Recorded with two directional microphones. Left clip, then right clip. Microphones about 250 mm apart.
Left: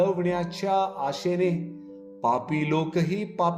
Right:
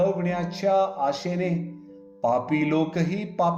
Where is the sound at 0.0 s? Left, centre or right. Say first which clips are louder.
Even; left.